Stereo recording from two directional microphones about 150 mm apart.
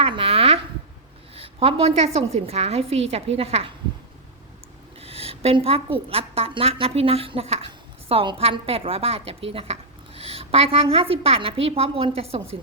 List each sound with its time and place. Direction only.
0.0 s a sound: 40° right (ahead or behind)
1.4 s a woman's voice: 40° right (ahead or behind)
4.9 s a woman's voice: 40° right (ahead or behind)